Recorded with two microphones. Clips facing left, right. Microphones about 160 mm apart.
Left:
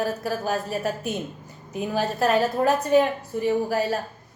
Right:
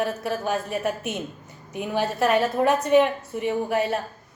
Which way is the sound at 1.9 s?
40° left (ahead or behind).